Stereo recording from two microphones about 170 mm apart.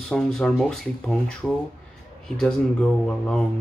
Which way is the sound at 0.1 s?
5° left (ahead or behind).